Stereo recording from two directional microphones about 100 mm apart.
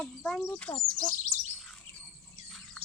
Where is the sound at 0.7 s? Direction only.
45° left (ahead or behind).